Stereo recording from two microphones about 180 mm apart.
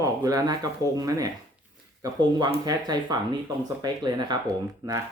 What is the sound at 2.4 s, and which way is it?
Speech, 25° right (ahead or behind).